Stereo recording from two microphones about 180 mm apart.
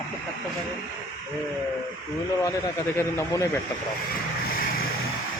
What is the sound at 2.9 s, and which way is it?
Speech, 15° left (ahead or behind).